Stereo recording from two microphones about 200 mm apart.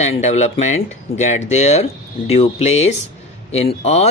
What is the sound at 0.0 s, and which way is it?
Speech, 35° left (ahead or behind).